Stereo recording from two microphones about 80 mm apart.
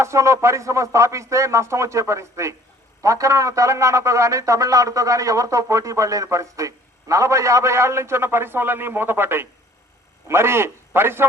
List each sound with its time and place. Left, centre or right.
0.0 s a man's voice: right